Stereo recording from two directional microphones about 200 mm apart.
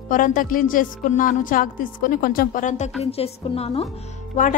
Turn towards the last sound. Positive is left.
turn(degrees=40)  # may be behind; listen again after turning